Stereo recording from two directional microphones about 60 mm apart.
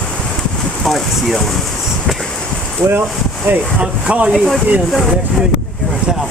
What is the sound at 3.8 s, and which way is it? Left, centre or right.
Speech, centre.